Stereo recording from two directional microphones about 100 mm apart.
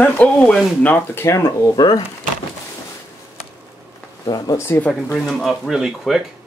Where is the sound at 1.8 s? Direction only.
50° left (ahead or behind).